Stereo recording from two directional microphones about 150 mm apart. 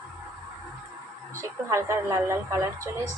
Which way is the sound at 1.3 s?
20° right (ahead or behind).